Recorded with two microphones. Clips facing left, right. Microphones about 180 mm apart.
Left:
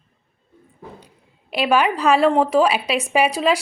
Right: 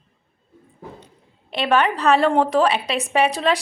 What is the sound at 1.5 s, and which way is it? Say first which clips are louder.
A woman's voice: left 1 dB; 10° left (ahead or behind).